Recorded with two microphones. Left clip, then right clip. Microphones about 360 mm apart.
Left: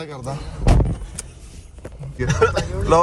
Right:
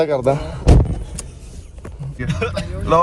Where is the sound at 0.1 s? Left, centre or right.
Right.